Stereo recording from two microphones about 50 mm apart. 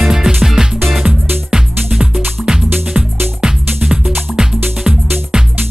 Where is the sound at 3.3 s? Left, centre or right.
Centre.